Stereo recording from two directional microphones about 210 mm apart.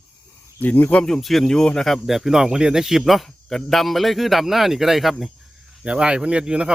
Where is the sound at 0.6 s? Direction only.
10° left (ahead or behind).